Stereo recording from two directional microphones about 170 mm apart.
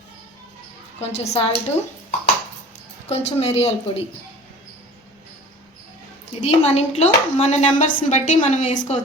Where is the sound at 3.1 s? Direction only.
40° left (ahead or behind).